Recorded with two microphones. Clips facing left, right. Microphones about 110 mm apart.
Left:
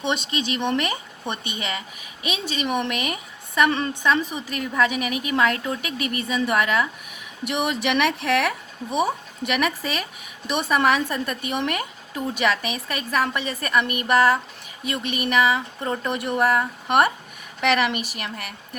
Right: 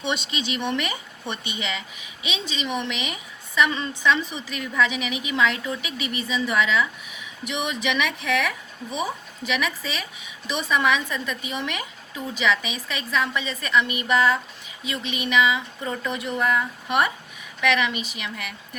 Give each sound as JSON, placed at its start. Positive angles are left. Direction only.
{"t": 0.1, "sound": "speech", "side_deg": 45}